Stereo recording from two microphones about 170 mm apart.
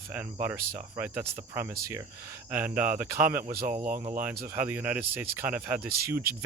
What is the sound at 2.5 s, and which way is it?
Speech, 10° right (ahead or behind).